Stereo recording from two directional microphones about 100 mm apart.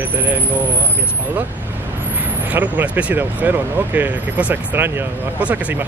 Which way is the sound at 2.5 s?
20° right (ahead or behind).